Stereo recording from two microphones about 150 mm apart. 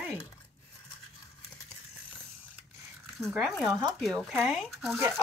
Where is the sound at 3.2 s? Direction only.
Centre (ahead or behind).